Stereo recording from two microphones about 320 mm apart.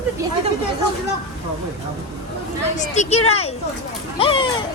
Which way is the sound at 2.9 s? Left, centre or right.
Left.